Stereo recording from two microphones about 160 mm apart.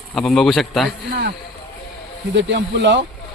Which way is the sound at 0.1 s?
Centre (ahead or behind).